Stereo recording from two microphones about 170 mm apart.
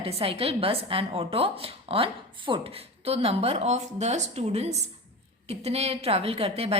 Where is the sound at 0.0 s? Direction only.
35° right (ahead or behind).